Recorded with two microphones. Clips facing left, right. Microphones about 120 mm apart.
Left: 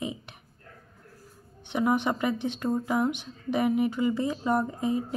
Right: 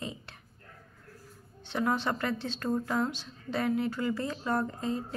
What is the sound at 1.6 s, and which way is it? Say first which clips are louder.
Speech: left 4 dB; 15° left (ahead or behind).